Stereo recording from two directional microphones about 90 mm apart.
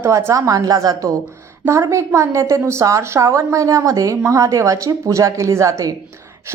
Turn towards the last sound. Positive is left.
turn(degrees=-35)  # may be behind; listen again after turning